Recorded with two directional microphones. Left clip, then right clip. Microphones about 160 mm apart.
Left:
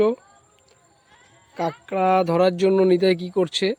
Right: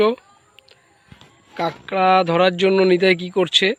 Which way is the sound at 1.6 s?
10° left (ahead or behind).